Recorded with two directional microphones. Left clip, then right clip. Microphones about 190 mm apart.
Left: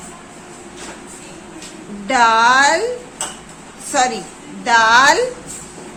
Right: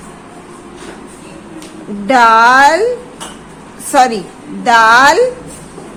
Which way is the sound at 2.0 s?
25° right (ahead or behind).